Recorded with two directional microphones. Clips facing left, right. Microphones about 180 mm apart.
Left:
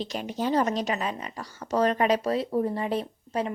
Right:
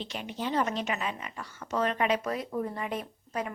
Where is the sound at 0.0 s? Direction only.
40° left (ahead or behind).